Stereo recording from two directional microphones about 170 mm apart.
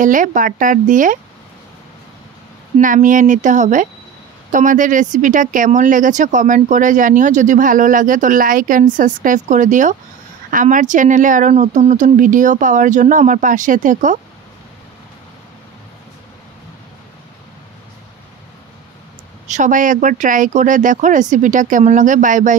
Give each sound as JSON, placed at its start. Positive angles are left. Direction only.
{"t": 0.0, "sound": "speech", "side_deg": -50}
{"t": 2.8, "sound": "speech", "side_deg": -50}
{"t": 19.4, "sound": "speech", "side_deg": -45}